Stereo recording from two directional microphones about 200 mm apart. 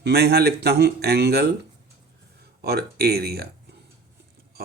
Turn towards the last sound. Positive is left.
turn(degrees=-50)  # may be behind; listen again after turning